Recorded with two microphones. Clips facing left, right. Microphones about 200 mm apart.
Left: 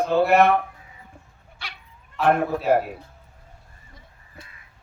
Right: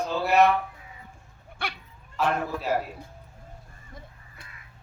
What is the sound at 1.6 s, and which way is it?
Dog, 55° right (ahead or behind).